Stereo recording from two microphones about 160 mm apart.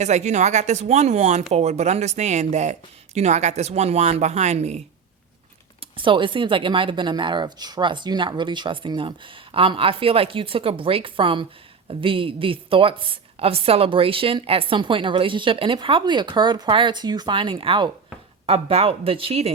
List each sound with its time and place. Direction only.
0.0 s speech: 45° right (ahead or behind)
5.8 s a woman's voice: 30° right (ahead or behind)